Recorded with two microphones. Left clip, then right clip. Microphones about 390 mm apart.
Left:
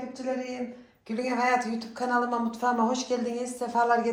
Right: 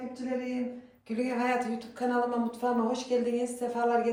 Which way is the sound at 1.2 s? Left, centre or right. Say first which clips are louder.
Left 5 dB; centre.